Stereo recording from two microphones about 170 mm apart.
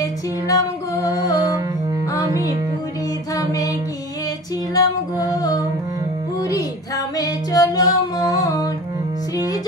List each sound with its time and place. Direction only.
0.0 s music: 20° left (ahead or behind)
3.3 s music: 20° left (ahead or behind)
4.7 s female singing: 20° left (ahead or behind)
5.3 s music: 20° left (ahead or behind)
7.2 s female singing: 20° left (ahead or behind)